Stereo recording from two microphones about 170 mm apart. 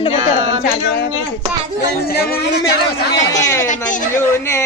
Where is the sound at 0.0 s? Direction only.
40° left (ahead or behind).